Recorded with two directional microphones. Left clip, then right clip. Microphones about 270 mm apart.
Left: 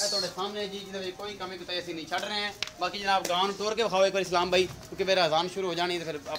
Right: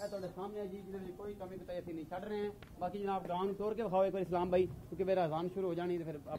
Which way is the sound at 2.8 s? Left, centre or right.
Right.